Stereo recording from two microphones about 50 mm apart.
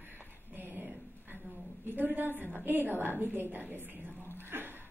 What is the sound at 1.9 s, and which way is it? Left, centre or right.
A woman's voice, right.